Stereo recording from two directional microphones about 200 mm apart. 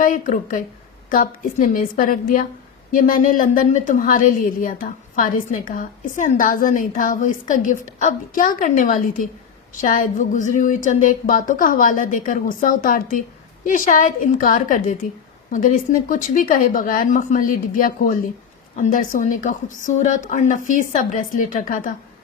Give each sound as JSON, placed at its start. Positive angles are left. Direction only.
{"t": 0.0, "sound": "a woman's voice", "side_deg": 40}